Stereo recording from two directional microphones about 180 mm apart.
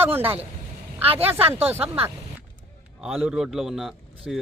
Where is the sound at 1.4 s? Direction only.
10° right (ahead or behind).